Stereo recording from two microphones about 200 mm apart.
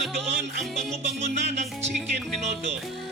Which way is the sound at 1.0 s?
35° right (ahead or behind).